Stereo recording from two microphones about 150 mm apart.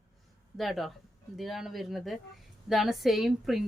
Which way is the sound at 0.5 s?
Centre (ahead or behind).